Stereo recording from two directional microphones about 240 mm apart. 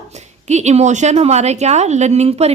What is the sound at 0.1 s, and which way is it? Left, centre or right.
A woman's voice, right.